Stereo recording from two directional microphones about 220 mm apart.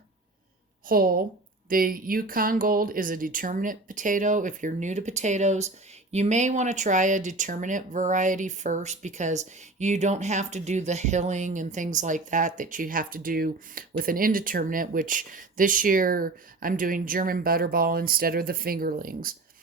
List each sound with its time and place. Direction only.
0.9 s speech: 40° right (ahead or behind)